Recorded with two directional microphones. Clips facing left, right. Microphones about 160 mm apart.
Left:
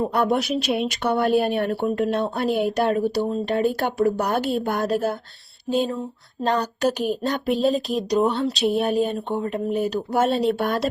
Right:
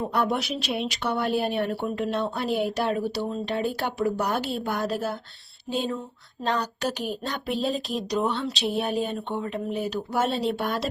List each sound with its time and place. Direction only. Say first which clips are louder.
0.1 s speech: left 5 dB; 50° left (ahead or behind)
6.4 s speech: left 5 dB; 45° left (ahead or behind)